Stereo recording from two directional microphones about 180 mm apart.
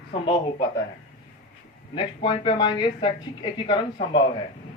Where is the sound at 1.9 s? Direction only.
30° left (ahead or behind).